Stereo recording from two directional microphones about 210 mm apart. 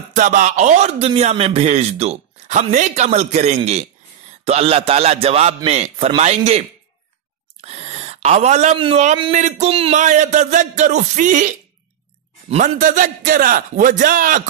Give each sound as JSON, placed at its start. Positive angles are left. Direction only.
{"t": 0.1, "sound": "a man's voice", "side_deg": -35}
{"t": 7.6, "sound": "a man's voice", "side_deg": -30}